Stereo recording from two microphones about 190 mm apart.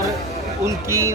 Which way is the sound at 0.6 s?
15° right (ahead or behind).